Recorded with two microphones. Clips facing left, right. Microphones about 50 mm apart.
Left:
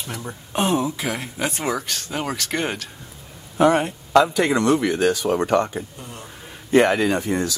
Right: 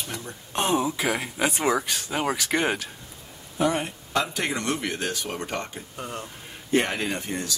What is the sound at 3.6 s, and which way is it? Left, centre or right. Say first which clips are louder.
Speech: left 7 dB; left.